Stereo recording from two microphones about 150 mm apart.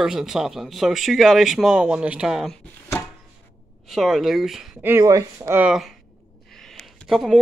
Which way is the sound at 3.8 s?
Centre (ahead or behind).